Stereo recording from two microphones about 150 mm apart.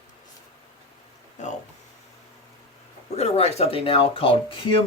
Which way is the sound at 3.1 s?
45° left (ahead or behind).